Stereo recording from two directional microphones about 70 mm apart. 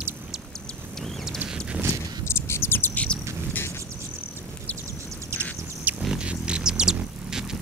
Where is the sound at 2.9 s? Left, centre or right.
Centre.